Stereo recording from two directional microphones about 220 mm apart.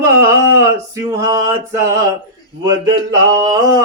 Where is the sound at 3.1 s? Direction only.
15° right (ahead or behind).